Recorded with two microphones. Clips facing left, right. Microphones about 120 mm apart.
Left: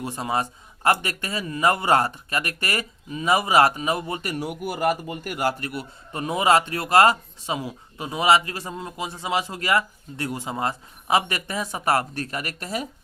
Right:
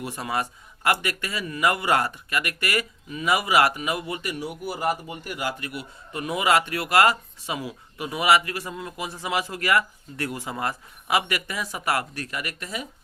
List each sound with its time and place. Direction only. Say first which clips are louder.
0.0 s a man's voice: left 2 dB; 25° left (ahead or behind)